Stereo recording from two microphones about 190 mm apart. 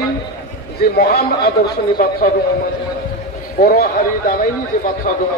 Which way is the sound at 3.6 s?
50° left (ahead or behind).